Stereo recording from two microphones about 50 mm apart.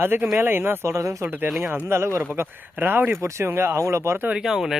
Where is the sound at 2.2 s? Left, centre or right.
Right.